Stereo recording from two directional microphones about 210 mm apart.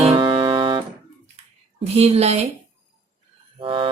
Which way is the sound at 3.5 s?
25° right (ahead or behind).